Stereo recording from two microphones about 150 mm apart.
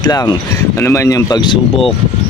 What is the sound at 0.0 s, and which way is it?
Speech, 25° left (ahead or behind).